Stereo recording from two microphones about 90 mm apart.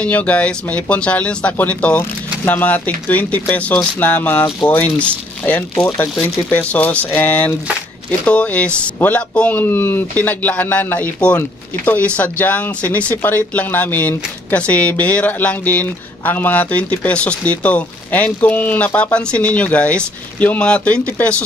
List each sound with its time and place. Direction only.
0.0 s speech: 15° left (ahead or behind)